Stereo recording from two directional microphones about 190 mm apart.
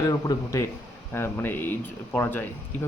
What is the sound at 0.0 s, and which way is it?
Speech, 15° left (ahead or behind).